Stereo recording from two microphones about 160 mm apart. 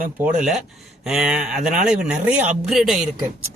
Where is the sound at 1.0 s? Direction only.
5° right (ahead or behind).